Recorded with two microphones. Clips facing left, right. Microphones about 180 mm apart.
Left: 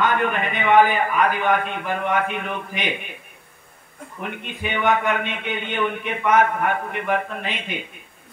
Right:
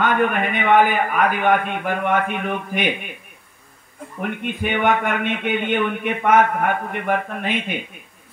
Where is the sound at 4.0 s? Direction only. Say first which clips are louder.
Right 3 dB; centre (ahead or behind).